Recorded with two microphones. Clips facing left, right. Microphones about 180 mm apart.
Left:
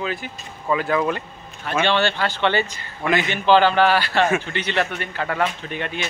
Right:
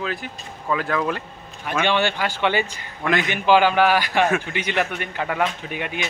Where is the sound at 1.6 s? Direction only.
15° right (ahead or behind).